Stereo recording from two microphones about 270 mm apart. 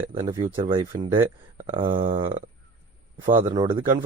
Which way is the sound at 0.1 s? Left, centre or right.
Centre.